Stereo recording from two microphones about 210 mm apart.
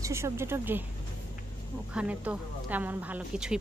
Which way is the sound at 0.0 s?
10° right (ahead or behind).